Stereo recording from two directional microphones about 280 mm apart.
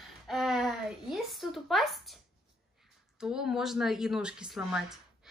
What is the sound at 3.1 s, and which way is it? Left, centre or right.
A woman's voice, centre.